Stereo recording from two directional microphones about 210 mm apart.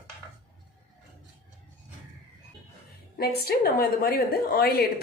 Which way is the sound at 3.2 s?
50° left (ahead or behind).